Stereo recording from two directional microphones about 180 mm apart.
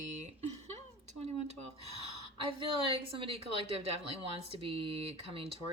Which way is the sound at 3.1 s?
30° right (ahead or behind).